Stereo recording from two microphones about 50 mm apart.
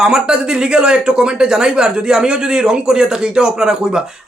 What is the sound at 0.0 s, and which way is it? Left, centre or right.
Speech, centre.